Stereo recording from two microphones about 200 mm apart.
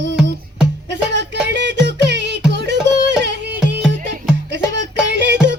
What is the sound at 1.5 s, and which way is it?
Music, 60° right (ahead or behind).